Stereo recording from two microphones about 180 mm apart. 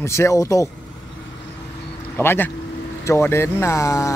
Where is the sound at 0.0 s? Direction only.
15° left (ahead or behind).